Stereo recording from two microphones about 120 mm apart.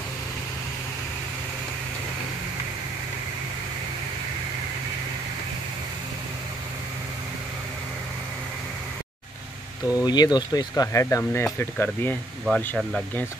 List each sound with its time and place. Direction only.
9.9 s speech: 35° left (ahead or behind); by 12.2 s 15° left (ahead or behind)
12.4 s speech: 5° left (ahead or behind)